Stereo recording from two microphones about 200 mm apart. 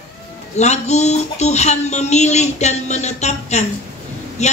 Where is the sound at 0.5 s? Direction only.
35° left (ahead or behind).